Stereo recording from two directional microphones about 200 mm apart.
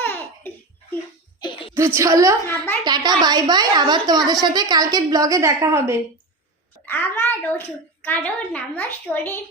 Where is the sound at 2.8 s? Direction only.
20° right (ahead or behind).